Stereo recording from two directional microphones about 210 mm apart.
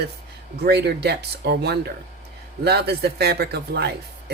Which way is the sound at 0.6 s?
50° right (ahead or behind).